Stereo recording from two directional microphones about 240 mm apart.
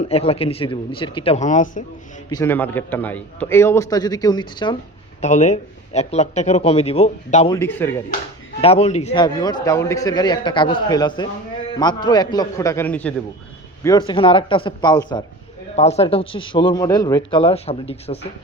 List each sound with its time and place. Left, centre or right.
0.0 s speech: left
2.3 s a man's voice: centre
5.2 s speech: left
7.5 s a man's voice: centre
8.6 s speech: left
9.2 s a man's voice: centre
13.8 s speech: centre